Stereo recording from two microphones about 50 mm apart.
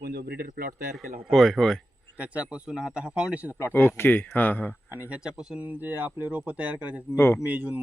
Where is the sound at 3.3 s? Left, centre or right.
Right.